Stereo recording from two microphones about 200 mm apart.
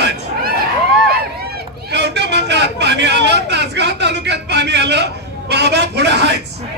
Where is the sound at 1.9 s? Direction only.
60° right (ahead or behind).